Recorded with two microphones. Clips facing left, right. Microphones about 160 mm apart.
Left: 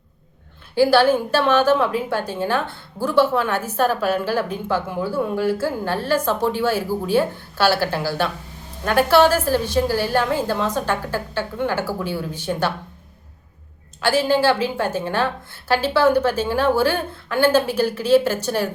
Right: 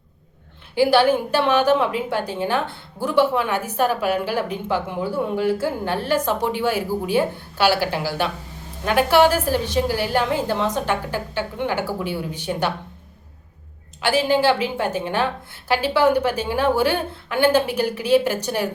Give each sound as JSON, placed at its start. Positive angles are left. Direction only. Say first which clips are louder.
{"t": 0.8, "sound": "a woman's voice", "louder": "left 1 dB", "side_deg": -15}
{"t": 14.0, "sound": "a woman's voice", "louder": "left 1 dB", "side_deg": -15}